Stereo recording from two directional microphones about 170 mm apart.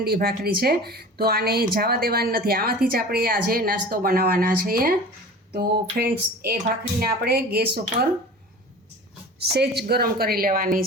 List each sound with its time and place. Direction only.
0.0 s speech: 65° right (ahead or behind)
9.4 s speech: 75° right (ahead or behind); by 10.8 s 55° right (ahead or behind)